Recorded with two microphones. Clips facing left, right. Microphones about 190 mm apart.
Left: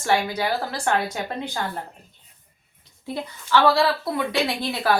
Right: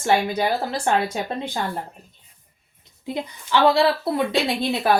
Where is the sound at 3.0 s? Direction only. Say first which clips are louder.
Right 2 dB; 20° right (ahead or behind).